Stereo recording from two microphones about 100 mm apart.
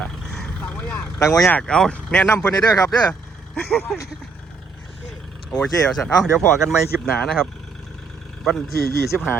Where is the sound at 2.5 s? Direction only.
35° left (ahead or behind).